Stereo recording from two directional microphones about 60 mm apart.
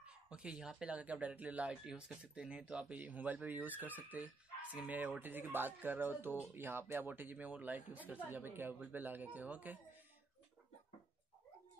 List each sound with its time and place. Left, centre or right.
0.0 s speech: centre
1.7 s speech: centre
2.3 s speech: centre